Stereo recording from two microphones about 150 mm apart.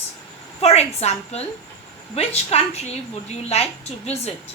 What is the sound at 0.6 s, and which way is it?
Speech, 45° left (ahead or behind).